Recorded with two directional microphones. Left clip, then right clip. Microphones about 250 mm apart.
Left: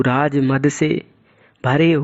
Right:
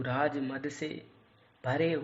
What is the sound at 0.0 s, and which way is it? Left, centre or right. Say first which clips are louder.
A man's voice: left 14 dB; left.